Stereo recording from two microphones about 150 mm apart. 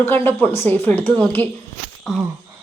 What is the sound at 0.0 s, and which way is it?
A woman's voice, 15° left (ahead or behind).